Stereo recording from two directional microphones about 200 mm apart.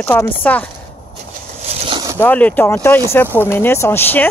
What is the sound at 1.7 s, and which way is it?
Boat, 25° right (ahead or behind).